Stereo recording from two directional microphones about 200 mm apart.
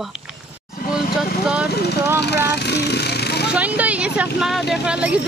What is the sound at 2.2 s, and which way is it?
Speech, 55° left (ahead or behind).